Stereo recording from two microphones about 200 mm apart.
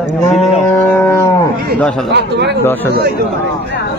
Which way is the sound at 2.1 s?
60° right (ahead or behind).